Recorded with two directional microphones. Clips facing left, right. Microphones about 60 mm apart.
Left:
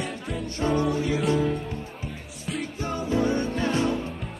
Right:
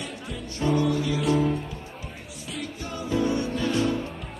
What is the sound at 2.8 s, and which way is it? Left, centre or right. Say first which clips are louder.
Music: left 1 dB; left.